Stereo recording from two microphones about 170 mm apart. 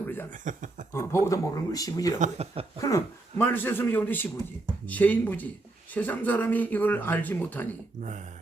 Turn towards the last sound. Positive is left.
turn(degrees=10)  # may be behind; listen again after turning